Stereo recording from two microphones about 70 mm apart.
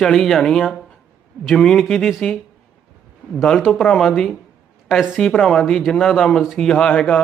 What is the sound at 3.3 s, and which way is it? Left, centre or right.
Speech, centre.